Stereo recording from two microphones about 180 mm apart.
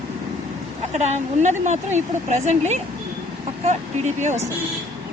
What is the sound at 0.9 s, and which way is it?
A woman's voice, 40° right (ahead or behind).